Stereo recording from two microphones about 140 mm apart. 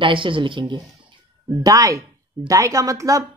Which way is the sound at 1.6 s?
25° right (ahead or behind).